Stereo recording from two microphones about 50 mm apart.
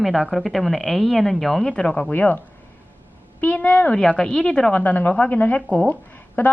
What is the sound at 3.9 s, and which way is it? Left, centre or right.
A woman's voice, centre.